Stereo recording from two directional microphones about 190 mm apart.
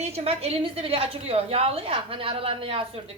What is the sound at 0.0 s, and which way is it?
A woman's voice, 30° right (ahead or behind).